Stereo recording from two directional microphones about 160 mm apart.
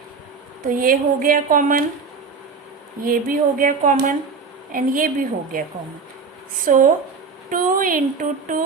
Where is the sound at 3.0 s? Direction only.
60° right (ahead or behind).